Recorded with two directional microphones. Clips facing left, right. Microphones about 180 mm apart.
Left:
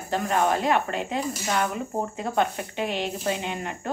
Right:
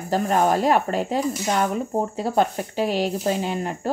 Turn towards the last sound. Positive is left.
turn(degrees=-35)  # may be behind; listen again after turning